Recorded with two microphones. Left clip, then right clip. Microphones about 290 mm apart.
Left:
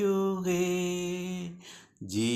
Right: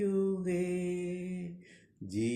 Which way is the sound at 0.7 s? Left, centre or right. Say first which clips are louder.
Left 4 dB; left.